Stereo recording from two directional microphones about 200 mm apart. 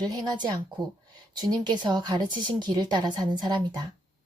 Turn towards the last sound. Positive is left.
turn(degrees=-20)  # may be behind; listen again after turning